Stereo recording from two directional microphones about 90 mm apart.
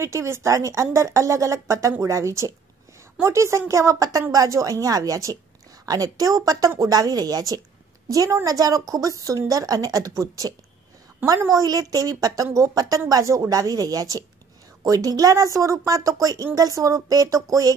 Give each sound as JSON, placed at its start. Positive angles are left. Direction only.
{"t": 0.0, "sound": "a woman's voice", "side_deg": -30}
{"t": 11.5, "sound": "a woman's voice", "side_deg": -40}